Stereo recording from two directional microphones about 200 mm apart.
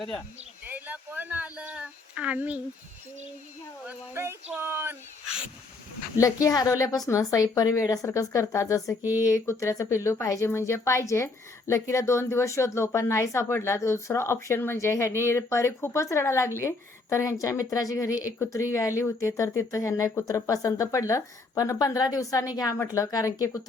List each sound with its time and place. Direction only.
0.6 s speech: 10° right (ahead or behind)
3.8 s speech: 10° right (ahead or behind)
6.1 s speech: 15° left (ahead or behind)